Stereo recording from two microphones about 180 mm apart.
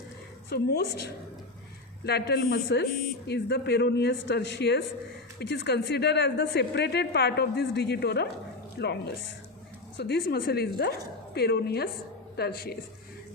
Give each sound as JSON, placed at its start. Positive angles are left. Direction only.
{"t": 0.5, "sound": "a woman's voice", "side_deg": 60}
{"t": 10.0, "sound": "speech", "side_deg": 65}